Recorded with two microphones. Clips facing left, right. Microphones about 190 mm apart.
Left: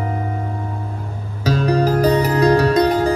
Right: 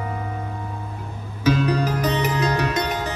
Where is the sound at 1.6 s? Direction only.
35° left (ahead or behind).